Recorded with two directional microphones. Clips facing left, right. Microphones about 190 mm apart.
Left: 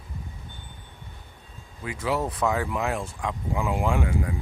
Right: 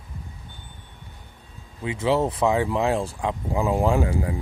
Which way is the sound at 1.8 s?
25° right (ahead or behind).